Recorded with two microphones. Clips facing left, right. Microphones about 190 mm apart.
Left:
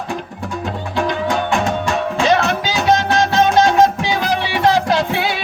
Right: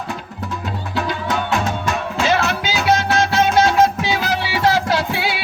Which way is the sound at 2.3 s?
20° left (ahead or behind).